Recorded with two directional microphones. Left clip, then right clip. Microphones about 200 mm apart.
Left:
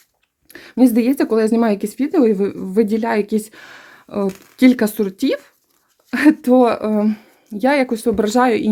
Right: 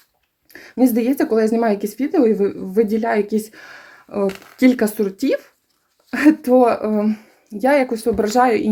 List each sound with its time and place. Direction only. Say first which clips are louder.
0.5 s speech: left 2 dB; 35° left (ahead or behind)